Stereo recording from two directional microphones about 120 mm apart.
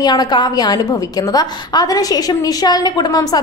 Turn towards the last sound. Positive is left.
turn(degrees=30)  # may be behind; listen again after turning